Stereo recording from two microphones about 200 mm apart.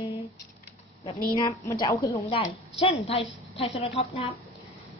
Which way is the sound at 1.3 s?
20° left (ahead or behind).